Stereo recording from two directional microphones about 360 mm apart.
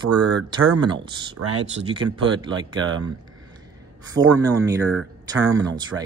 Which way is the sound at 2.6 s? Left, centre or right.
Right.